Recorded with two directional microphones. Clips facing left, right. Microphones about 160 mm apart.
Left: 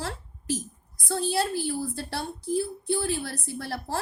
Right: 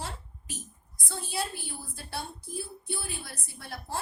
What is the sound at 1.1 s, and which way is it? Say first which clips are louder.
A woman's voice: left 9 dB; 90° left.